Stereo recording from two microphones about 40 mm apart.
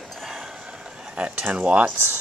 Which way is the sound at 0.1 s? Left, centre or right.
Centre.